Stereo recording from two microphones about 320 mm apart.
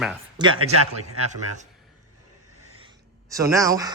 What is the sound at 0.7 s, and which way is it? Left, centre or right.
Speech, right.